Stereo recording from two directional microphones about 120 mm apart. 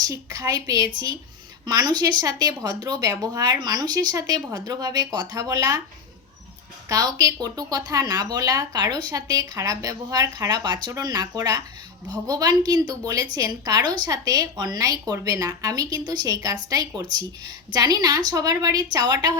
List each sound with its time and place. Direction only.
0.0 s speech: 30° right (ahead or behind)
6.8 s speech: 30° right (ahead or behind)